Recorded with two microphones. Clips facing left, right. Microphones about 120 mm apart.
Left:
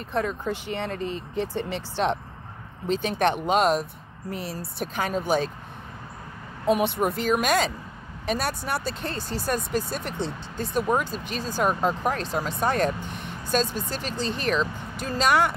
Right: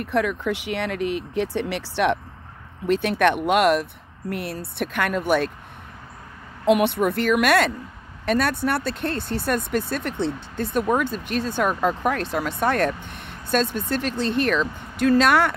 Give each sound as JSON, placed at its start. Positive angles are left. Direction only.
{"t": 0.0, "sound": "speech", "side_deg": -70}
{"t": 6.7, "sound": "speech", "side_deg": -60}